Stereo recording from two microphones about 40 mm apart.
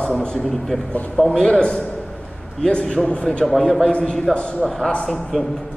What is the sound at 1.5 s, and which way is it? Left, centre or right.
Speech, left.